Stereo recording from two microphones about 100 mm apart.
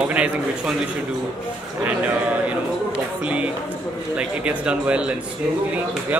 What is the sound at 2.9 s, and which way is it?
A man's voice, 15° right (ahead or behind).